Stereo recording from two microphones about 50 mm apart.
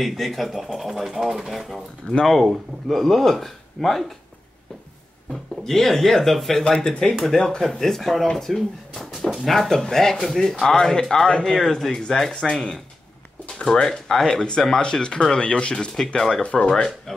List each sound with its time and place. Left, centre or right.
0.0 s speech: centre
5.3 s speech: centre
11.4 s speech: centre
16.2 s speech: centre
16.4 s speech: left